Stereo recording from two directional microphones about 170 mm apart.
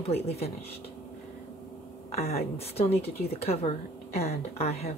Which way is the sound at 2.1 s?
40° left (ahead or behind).